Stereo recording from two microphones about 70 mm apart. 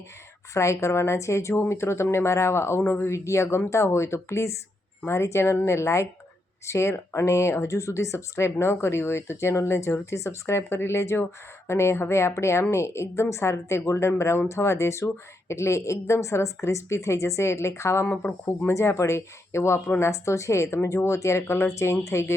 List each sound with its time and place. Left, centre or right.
0.5 s a woman's voice: left
18.1 s speech: left
18.7 s a woman's voice: left